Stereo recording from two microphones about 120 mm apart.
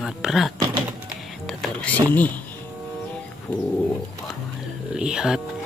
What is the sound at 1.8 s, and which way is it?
Speech, 15° left (ahead or behind).